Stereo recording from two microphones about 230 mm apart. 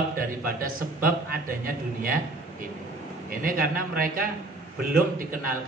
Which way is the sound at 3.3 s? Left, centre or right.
Right.